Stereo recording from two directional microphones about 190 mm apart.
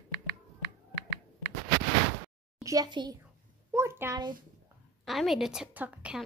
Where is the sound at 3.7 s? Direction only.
15° right (ahead or behind).